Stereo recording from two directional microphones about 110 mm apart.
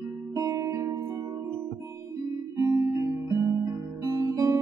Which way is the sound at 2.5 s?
30° right (ahead or behind).